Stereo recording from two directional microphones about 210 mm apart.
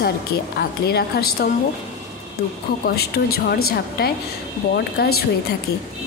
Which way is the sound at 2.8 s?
50° left (ahead or behind).